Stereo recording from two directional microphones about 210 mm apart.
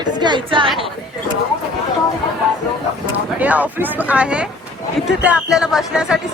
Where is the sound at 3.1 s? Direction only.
5° right (ahead or behind).